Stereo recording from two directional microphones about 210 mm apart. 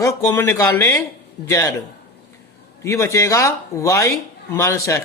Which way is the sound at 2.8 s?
15° left (ahead or behind).